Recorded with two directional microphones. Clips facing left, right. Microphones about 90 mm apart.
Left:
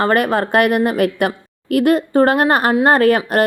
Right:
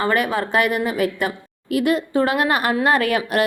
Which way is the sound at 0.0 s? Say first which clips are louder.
Left 5 dB; 50° left (ahead or behind).